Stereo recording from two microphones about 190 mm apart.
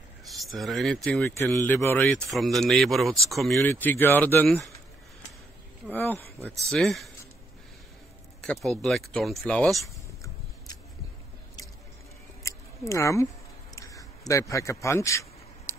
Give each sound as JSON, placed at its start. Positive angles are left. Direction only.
{"t": 0.3, "sound": "speech", "side_deg": 0}
{"t": 5.9, "sound": "speech", "side_deg": 10}
{"t": 6.7, "sound": "speech", "side_deg": 0}
{"t": 8.4, "sound": "speech", "side_deg": 0}
{"t": 12.4, "sound": "a sound", "side_deg": 15}